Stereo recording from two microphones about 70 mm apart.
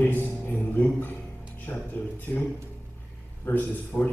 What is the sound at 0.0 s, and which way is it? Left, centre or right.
Music, left.